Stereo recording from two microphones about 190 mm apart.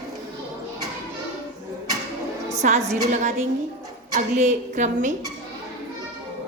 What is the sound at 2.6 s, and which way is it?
Speech, 40° right (ahead or behind).